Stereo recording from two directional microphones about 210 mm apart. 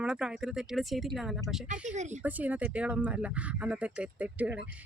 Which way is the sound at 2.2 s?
5° right (ahead or behind).